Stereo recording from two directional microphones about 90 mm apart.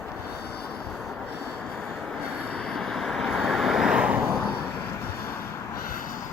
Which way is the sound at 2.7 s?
5° left (ahead or behind).